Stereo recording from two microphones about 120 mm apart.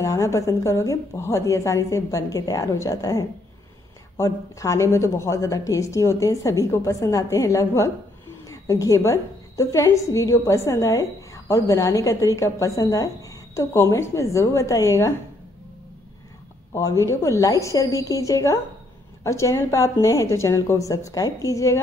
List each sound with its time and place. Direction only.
0.0 s a woman's voice: 25° left (ahead or behind)
16.7 s a woman's voice: 25° left (ahead or behind)